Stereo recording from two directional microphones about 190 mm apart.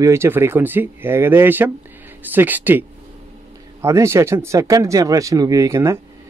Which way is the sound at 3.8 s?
15° right (ahead or behind).